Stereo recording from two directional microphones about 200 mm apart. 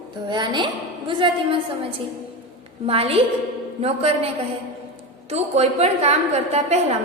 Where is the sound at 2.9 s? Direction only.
30° right (ahead or behind).